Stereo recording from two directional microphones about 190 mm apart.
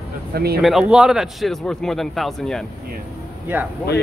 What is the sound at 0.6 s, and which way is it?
A man's voice, 5° right (ahead or behind).